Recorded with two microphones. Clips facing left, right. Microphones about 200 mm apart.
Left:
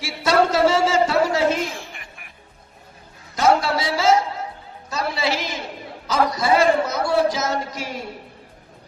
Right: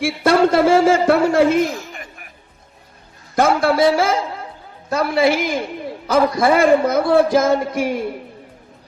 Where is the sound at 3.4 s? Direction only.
55° right (ahead or behind).